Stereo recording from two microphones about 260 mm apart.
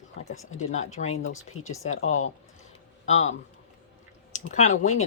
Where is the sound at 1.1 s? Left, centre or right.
Left.